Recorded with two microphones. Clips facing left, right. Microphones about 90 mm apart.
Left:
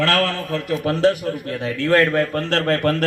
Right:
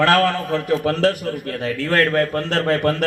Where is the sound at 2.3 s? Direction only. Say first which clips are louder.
Even; 5° right (ahead or behind).